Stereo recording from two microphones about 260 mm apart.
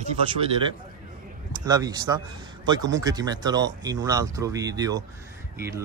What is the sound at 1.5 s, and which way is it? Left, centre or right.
A man's voice, centre.